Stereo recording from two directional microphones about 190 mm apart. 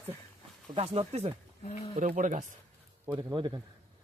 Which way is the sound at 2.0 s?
45° right (ahead or behind).